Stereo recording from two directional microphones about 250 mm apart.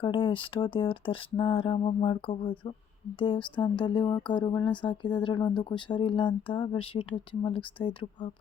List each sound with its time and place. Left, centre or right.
0.0 s speech: centre